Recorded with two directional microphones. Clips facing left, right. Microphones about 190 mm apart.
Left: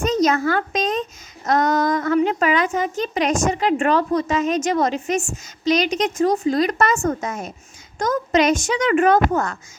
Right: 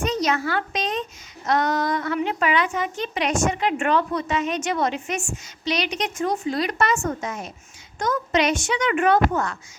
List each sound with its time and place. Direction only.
0.0 s a child's voice: 45° left (ahead or behind)